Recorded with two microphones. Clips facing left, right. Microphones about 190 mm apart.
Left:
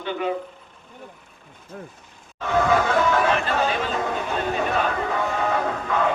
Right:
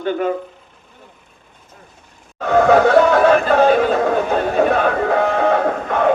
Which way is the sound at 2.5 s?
65° right (ahead or behind).